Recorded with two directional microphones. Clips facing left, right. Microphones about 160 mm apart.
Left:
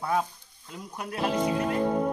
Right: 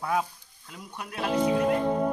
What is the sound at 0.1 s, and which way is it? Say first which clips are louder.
Speech: left 1 dB; 5° right (ahead or behind).